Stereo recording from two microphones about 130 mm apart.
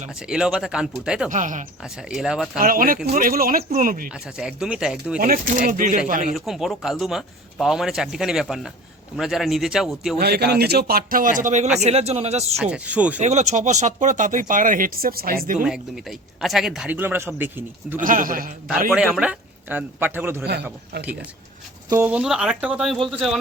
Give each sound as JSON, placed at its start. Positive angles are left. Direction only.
{"t": 0.2, "sound": "speech", "side_deg": -5}
{"t": 1.3, "sound": "speech", "side_deg": -75}
{"t": 1.8, "sound": "speech", "side_deg": -5}
{"t": 2.6, "sound": "speech", "side_deg": -90}
{"t": 4.1, "sound": "speech", "side_deg": -5}
{"t": 5.2, "sound": "speech", "side_deg": -90}
{"t": 6.3, "sound": "speech", "side_deg": 0}
{"t": 11.1, "sound": "speech", "side_deg": -90}
{"t": 11.8, "sound": "a man's voice", "side_deg": -55}
{"t": 12.7, "sound": "a man's voice", "side_deg": -10}
{"t": 13.1, "sound": "speech", "side_deg": -60}
{"t": 15.6, "sound": "a man's voice", "side_deg": -5}
{"t": 18.0, "sound": "speech", "side_deg": -90}
{"t": 18.9, "sound": "a man's voice", "side_deg": -10}